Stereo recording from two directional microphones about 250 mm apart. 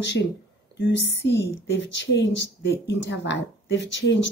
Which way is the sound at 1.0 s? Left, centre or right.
Left.